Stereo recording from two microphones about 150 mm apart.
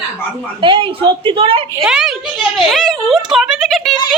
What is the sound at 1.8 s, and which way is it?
A woman's voice, centre (ahead or behind).